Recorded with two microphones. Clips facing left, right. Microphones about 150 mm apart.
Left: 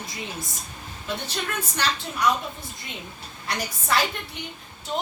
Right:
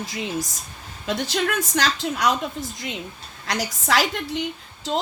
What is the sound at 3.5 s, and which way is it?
Speech, 90° right.